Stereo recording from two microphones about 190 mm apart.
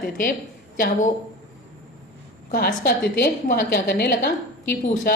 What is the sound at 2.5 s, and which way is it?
Speech, 50° left (ahead or behind).